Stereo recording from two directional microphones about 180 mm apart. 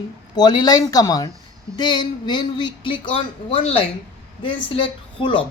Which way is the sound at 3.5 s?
30° left (ahead or behind).